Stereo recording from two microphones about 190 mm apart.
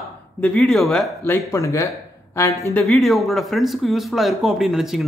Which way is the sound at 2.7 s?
5° left (ahead or behind).